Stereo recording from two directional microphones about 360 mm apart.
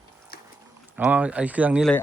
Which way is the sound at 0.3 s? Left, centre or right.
Left.